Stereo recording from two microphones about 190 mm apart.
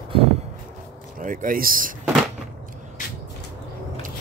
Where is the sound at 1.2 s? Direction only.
45° right (ahead or behind).